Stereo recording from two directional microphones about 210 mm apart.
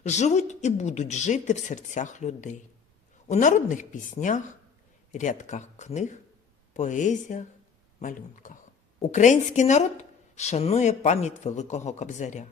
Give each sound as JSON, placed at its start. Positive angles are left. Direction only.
{"t": 0.0, "sound": "speech", "side_deg": 35}